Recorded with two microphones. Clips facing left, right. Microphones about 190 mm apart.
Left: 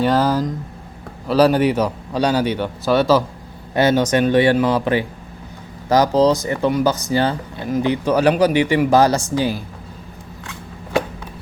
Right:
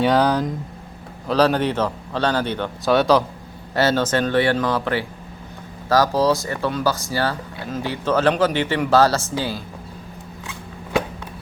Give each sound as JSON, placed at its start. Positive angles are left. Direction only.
{"t": 0.0, "sound": "speech", "side_deg": 0}
{"t": 3.8, "sound": "speech", "side_deg": 15}